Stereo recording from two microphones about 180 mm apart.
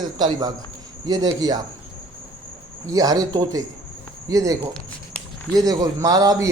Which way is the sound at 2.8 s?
20° right (ahead or behind).